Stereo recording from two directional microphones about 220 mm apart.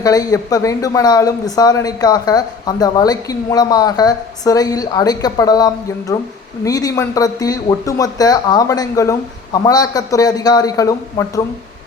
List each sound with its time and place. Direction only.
0.0 s speech: 15° left (ahead or behind)